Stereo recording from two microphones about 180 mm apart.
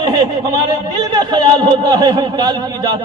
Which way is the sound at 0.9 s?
25° right (ahead or behind).